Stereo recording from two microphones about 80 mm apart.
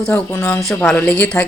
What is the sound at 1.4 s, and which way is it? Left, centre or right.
Speech, centre.